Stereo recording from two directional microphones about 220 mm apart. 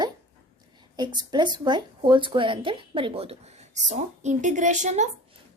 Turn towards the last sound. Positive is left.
turn(degrees=-30)  # may be behind; listen again after turning